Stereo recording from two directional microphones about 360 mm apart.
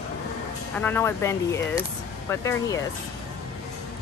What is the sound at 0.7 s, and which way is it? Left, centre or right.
Speech, centre.